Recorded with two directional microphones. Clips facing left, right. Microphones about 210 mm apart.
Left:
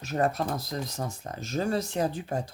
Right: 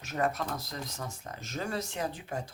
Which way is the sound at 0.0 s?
35° left (ahead or behind).